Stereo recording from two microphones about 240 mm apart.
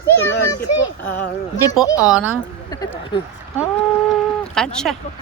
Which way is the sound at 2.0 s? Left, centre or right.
Centre.